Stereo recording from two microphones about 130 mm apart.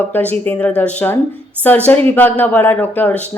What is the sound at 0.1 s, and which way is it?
Speech, 15° left (ahead or behind).